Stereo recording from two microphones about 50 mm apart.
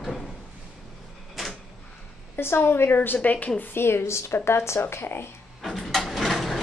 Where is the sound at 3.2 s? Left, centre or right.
Left.